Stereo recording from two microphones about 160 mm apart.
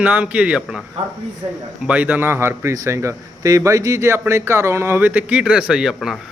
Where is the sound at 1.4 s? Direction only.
30° right (ahead or behind).